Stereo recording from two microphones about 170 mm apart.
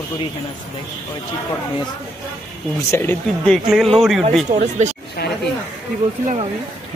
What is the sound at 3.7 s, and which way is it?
Speech, centre (ahead or behind).